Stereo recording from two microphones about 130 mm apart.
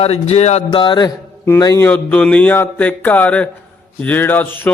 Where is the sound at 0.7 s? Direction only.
40° left (ahead or behind).